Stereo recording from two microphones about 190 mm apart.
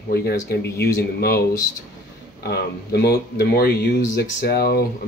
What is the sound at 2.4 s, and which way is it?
Speech, 60° left (ahead or behind).